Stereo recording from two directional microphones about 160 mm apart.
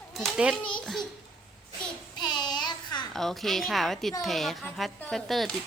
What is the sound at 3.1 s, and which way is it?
Speech, centre (ahead or behind).